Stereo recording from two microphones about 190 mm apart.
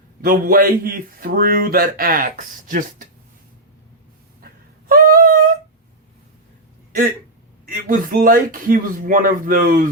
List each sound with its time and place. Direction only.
0.2 s a man's voice: 50° right (ahead or behind)
4.9 s a sound: 50° right (ahead or behind)
7.6 s a man's voice: 45° right (ahead or behind)